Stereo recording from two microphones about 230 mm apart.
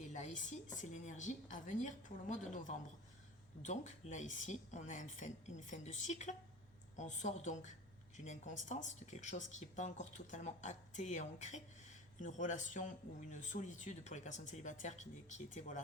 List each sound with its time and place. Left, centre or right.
0.0 s speech: left